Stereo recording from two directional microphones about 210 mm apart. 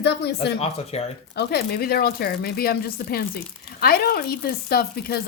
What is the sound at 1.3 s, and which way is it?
Speech, 50° left (ahead or behind).